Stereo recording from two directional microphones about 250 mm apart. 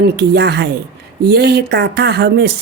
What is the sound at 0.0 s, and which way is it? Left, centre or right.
A woman's voice, right.